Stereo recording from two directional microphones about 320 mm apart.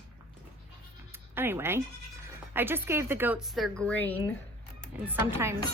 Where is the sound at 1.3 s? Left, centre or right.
Centre.